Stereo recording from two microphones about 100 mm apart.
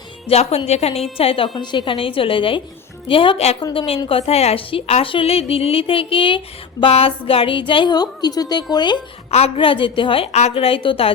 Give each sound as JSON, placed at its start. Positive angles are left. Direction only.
{"t": 0.3, "sound": "a woman's voice", "side_deg": 85}
{"t": 1.1, "sound": "a woman's voice", "side_deg": 70}
{"t": 1.5, "sound": "a woman's voice", "side_deg": 55}
{"t": 3.6, "sound": "a woman's voice", "side_deg": 60}
{"t": 4.1, "sound": "a woman's voice", "side_deg": 90}
{"t": 7.9, "sound": "a woman's voice", "side_deg": 40}
{"t": 9.3, "sound": "a woman's voice", "side_deg": 75}